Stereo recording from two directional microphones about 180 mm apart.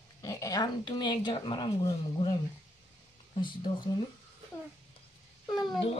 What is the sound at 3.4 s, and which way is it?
Speech, 25° left (ahead or behind).